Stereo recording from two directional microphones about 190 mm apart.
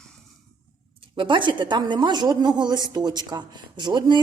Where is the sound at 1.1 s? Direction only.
25° right (ahead or behind).